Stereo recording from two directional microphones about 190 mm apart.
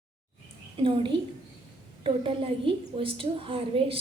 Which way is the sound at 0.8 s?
25° right (ahead or behind).